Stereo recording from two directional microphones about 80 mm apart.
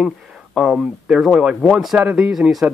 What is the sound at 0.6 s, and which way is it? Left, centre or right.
Speech, centre.